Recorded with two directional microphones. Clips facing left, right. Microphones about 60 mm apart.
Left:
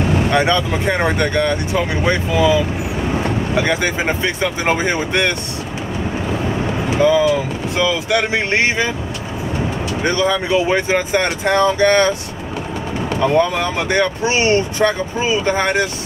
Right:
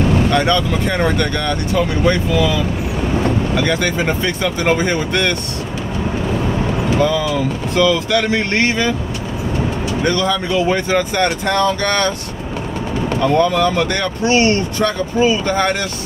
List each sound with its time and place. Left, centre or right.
0.3 s speech: centre
3.5 s speech: centre
7.0 s speech: left
10.0 s speech: left
13.2 s speech: centre